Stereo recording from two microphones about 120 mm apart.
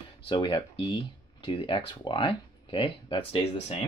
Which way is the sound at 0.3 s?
40° left (ahead or behind).